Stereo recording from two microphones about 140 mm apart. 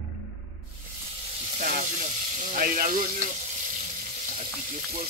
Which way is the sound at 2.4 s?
70° right (ahead or behind).